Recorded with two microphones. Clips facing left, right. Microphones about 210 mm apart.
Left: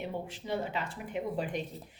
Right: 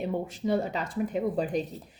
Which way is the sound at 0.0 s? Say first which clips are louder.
Right 8 dB; 40° right (ahead or behind).